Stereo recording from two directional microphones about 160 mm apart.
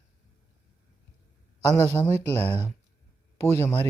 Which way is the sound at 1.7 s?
15° left (ahead or behind).